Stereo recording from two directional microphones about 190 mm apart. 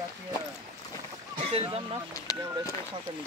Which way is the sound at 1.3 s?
30° right (ahead or behind).